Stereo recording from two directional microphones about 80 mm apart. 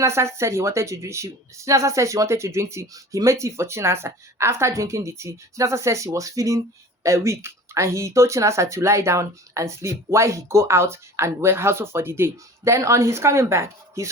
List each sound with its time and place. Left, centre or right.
0.0 s speech: right